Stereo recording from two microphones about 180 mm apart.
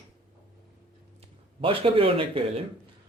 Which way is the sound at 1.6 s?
30° right (ahead or behind).